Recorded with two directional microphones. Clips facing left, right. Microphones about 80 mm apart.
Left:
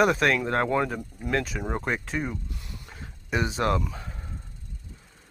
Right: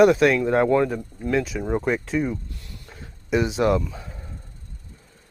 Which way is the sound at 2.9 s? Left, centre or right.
Centre.